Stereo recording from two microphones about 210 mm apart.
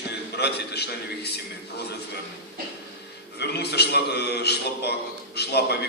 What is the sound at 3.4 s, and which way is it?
A man's voice, 50° left (ahead or behind).